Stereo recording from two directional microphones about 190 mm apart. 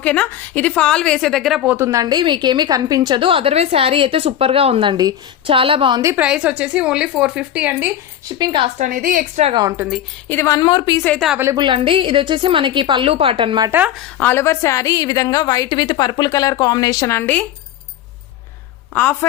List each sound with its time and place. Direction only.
0.0 s a woman's voice: 5° left (ahead or behind); by 6.0 s 30° right (ahead or behind)
6.0 s a woman's voice: 10° right (ahead or behind)
8.4 s a woman's voice: 25° right (ahead or behind)
8.8 s a woman's voice: 45° right (ahead or behind)
9.4 s a woman's voice: 25° right (ahead or behind)
9.7 s a woman's voice: 5° right (ahead or behind)
10.2 s a woman's voice: 15° left (ahead or behind)
11.0 s a woman's voice: 10° left (ahead or behind)
11.3 s a woman's voice: 10° right (ahead or behind)
11.5 s a woman's voice: 25° right (ahead or behind)
13.7 s a woman's voice: 5° right (ahead or behind); by 17.4 s 10° left (ahead or behind)